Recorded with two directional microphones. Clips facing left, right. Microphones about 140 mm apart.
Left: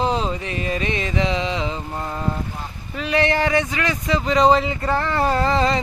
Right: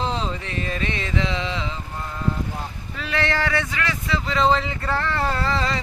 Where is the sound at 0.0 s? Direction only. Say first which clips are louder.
Left 4 dB; 10° left (ahead or behind).